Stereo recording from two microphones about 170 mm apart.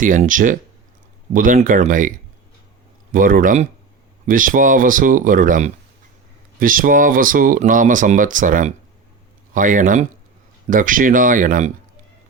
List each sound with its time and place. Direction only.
0.0 s speech: 50° right (ahead or behind)